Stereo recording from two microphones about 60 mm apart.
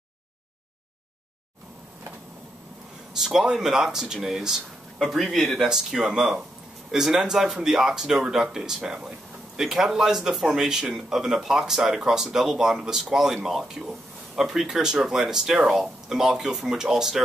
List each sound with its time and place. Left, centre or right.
3.2 s speech: centre
5.7 s speech: centre